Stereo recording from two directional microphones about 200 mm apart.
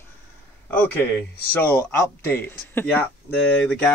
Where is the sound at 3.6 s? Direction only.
5° left (ahead or behind).